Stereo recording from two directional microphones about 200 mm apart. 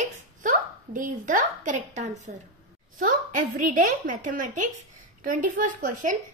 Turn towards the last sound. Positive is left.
turn(degrees=-40)  # may be behind; listen again after turning